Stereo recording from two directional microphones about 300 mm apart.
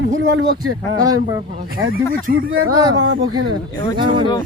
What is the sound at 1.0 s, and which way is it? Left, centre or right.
Speech, centre.